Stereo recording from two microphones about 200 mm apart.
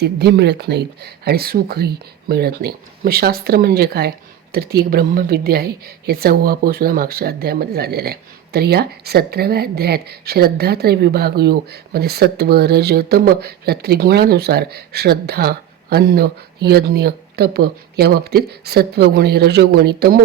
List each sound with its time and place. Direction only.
0.0 s speech: 55° right (ahead or behind)